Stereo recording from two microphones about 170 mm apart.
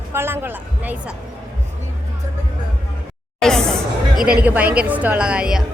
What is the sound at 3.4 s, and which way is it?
Chatter, 5° left (ahead or behind).